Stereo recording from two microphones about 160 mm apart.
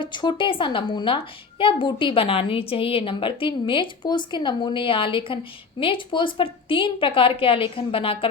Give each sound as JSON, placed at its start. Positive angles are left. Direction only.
{"t": 0.0, "sound": "a woman's voice", "side_deg": 30}